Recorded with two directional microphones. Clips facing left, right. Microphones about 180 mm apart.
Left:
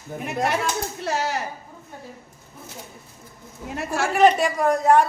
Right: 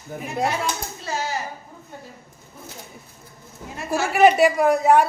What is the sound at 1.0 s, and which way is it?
Speech, 65° left (ahead or behind).